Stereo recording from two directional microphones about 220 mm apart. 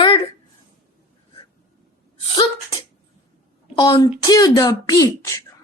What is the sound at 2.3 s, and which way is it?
Speech, 20° left (ahead or behind).